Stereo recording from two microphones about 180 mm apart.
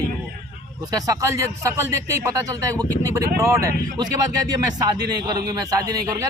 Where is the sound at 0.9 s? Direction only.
15° right (ahead or behind).